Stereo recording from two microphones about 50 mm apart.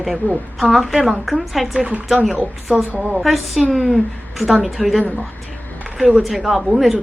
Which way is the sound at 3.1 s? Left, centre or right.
Centre.